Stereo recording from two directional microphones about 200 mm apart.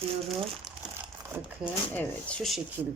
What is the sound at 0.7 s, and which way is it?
Crumpling, centre (ahead or behind).